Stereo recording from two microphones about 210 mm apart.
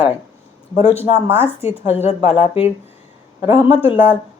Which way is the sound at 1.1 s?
10° right (ahead or behind).